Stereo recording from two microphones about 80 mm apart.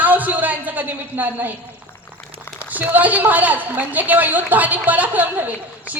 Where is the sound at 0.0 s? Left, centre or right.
Right.